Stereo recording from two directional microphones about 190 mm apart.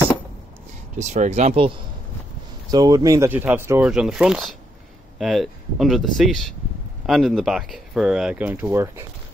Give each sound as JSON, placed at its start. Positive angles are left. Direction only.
{"t": 0.9, "sound": "speech", "side_deg": -40}
{"t": 2.7, "sound": "speech", "side_deg": -20}